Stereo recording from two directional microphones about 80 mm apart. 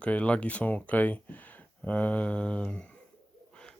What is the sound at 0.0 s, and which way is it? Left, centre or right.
Speech, centre.